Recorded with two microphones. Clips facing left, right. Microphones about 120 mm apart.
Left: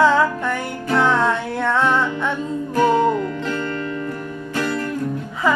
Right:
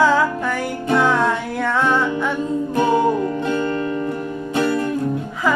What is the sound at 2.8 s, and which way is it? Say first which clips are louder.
Music: left 1 dB; 20° right (ahead or behind).